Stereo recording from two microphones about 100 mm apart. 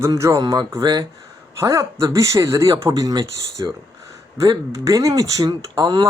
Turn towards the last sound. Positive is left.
turn(degrees=-45)  # may be behind; listen again after turning